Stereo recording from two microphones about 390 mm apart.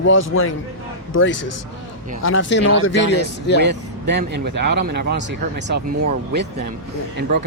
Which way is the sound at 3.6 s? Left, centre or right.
Right.